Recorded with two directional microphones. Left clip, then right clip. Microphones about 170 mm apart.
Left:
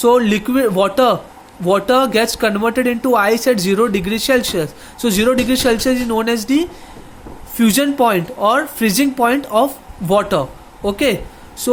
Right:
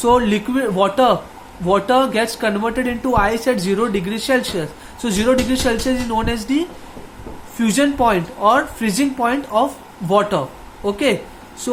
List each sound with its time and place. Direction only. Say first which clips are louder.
0.0 s speech: left 2 dB; 35° left (ahead or behind)